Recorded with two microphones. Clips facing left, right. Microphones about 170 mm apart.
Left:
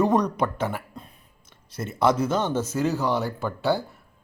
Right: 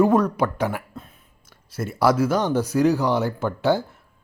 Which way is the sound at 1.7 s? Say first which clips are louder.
Right 2 dB; 10° right (ahead or behind).